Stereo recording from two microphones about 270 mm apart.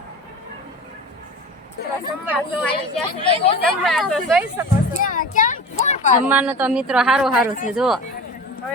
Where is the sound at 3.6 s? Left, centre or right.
Centre.